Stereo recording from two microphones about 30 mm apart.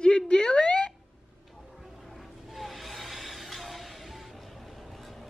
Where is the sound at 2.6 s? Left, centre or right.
Centre.